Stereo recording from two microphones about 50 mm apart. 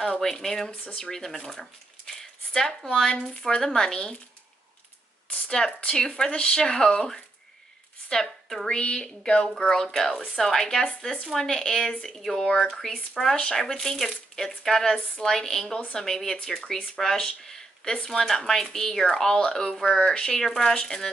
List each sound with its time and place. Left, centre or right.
0.0 s speech: centre
5.8 s speech: centre
8.6 s speech: centre
17.5 s a sound: centre
18.0 s speech: centre